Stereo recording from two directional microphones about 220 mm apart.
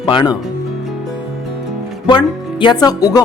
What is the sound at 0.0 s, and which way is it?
Speech, 20° left (ahead or behind).